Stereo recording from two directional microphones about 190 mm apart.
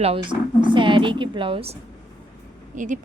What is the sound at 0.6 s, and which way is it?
A woman's voice, 25° right (ahead or behind).